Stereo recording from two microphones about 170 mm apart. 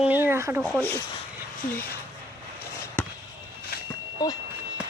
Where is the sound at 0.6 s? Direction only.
10° left (ahead or behind).